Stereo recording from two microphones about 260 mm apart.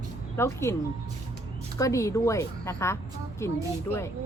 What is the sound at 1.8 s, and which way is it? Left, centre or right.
A woman's voice, centre.